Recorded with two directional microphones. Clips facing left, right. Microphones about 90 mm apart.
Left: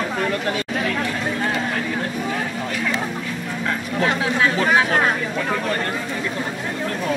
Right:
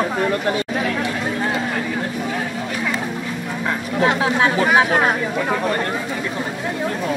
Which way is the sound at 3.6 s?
15° right (ahead or behind).